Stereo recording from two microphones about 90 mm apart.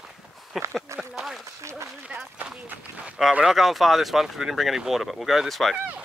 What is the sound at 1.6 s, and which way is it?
Speech, 35° right (ahead or behind).